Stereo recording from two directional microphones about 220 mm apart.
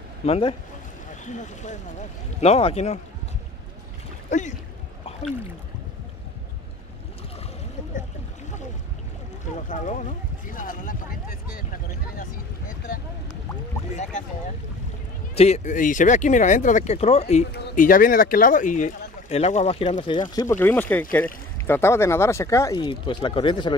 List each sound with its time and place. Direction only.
0.2 s speech: 25° left (ahead or behind)
4.3 s speech: 35° left (ahead or behind)
9.7 s speech: 35° left (ahead or behind)
15.3 s speech: 30° left (ahead or behind)